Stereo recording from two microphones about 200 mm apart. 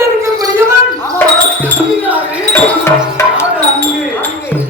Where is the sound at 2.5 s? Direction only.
10° left (ahead or behind).